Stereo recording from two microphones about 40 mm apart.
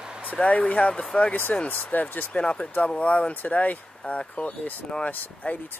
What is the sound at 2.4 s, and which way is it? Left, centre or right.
Speech, left.